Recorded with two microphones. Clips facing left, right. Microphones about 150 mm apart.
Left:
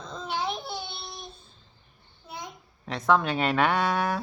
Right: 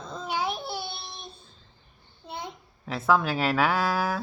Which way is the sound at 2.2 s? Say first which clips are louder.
Right 3 dB; 30° right (ahead or behind).